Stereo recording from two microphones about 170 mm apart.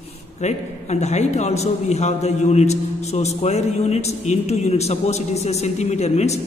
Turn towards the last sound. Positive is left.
turn(degrees=40)  # may be behind; listen again after turning